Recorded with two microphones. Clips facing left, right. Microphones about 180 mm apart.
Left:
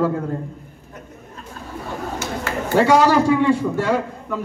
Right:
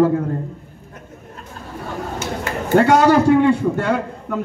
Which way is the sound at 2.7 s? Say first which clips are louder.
Right 2 dB; 60° right (ahead or behind).